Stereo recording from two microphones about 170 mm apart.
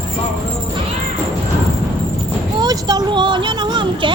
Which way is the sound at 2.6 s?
25° right (ahead or behind).